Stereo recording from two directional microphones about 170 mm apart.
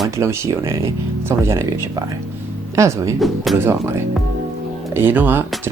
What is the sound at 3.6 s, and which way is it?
Speech, 15° right (ahead or behind).